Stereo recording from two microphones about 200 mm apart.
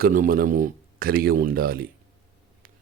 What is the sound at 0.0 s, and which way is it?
Speech, 45° right (ahead or behind).